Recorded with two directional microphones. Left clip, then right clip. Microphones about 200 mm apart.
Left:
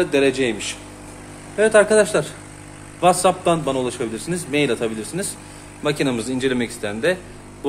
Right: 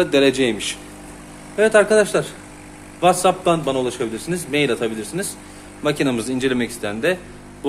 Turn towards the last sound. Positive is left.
turn(degrees=-5)  # may be behind; listen again after turning